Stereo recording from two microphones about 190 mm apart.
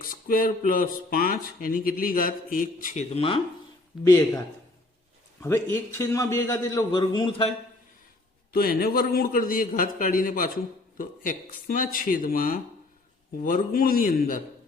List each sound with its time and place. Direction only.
0.0 s speech: 45° left (ahead or behind); by 3.4 s 30° left (ahead or behind)
4.0 s a man's voice: 20° left (ahead or behind)
8.5 s speech: 50° left (ahead or behind)